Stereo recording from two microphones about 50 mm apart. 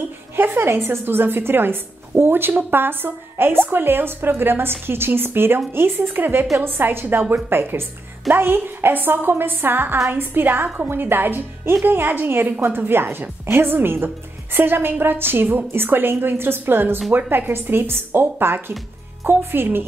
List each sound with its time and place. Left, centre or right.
0.4 s a woman's voice: right